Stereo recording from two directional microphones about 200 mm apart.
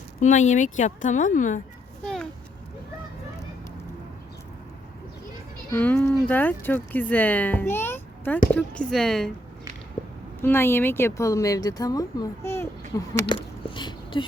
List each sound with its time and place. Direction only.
0.2 s speech: 35° left (ahead or behind)
5.7 s speech: 10° left (ahead or behind)
10.4 s speech: 10° left (ahead or behind)